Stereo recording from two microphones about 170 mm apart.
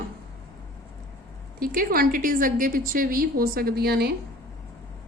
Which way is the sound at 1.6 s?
60° right (ahead or behind).